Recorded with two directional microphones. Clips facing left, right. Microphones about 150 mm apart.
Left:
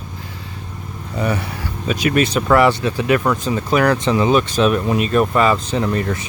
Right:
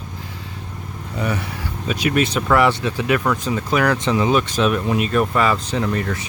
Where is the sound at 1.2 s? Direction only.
35° left (ahead or behind).